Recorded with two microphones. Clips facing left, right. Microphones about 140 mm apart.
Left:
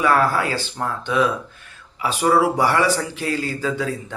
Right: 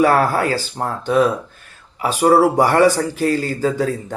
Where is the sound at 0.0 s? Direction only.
40° right (ahead or behind).